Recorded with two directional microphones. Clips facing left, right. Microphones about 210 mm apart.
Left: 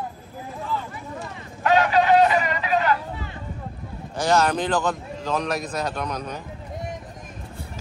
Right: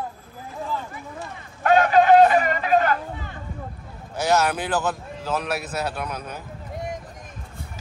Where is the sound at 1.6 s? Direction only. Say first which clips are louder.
Right 2 dB; 50° right (ahead or behind).